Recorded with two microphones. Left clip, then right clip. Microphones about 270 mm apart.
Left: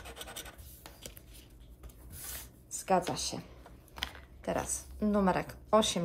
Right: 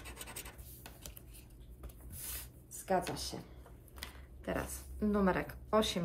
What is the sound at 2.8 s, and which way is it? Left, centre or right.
Speech, left.